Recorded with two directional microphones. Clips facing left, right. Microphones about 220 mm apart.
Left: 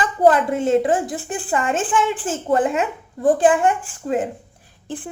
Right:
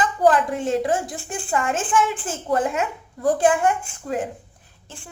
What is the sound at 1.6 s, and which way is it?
Speech, centre (ahead or behind).